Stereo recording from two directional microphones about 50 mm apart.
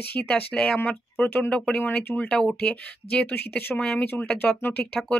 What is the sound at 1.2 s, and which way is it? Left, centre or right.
Speech, left.